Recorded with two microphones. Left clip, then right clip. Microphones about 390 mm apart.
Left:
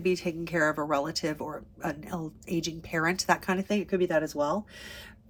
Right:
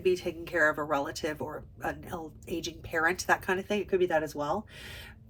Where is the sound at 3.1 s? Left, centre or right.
Centre.